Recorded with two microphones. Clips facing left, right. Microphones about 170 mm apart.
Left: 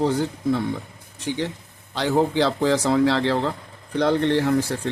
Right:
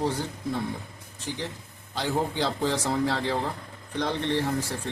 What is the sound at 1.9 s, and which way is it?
Speech, 90° left.